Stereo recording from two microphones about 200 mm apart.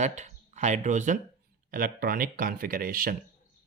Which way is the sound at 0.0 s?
35° right (ahead or behind).